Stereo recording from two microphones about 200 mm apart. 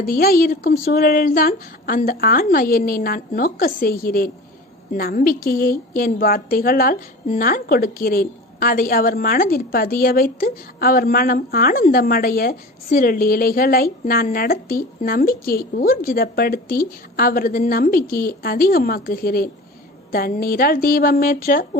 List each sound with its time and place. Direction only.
0.0 s a woman's voice: 45° left (ahead or behind)